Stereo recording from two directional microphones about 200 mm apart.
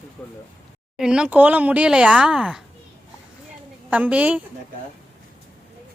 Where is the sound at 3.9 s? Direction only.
5° right (ahead or behind).